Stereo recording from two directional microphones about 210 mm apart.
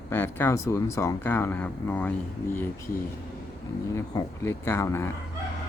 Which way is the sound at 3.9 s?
15° left (ahead or behind).